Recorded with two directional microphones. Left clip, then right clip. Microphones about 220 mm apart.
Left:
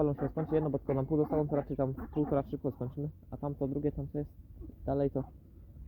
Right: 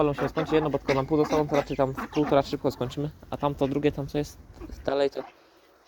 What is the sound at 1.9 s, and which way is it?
Speech, 45° right (ahead or behind).